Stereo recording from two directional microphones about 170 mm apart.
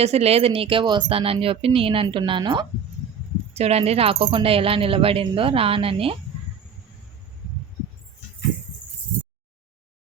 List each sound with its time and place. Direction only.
0.0 s a woman's voice: 35° right (ahead or behind)
3.5 s a woman's voice: 40° right (ahead or behind)